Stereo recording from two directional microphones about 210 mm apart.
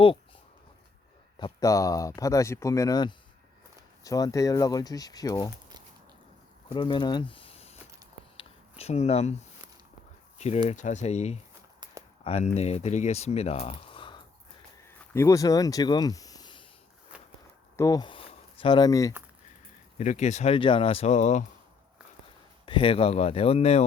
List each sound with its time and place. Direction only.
1.4 s speech: 20° left (ahead or behind)
6.7 s a sound: 20° left (ahead or behind)
10.3 s a sound: 30° left (ahead or behind)
10.7 s speech: 35° left (ahead or behind)
15.1 s speech: 15° left (ahead or behind)
17.7 s speech: 15° left (ahead or behind)
20.0 s speech: 35° left (ahead or behind)
22.6 s speech: 25° left (ahead or behind)